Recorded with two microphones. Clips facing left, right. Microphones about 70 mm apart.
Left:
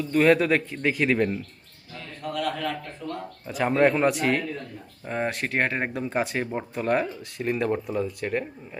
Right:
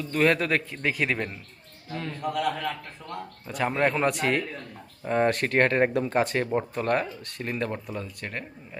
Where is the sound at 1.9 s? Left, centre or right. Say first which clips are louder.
Right 6 dB; right.